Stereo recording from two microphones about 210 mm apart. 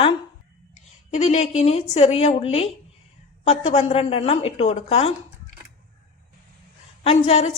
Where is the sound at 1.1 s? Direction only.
30° left (ahead or behind).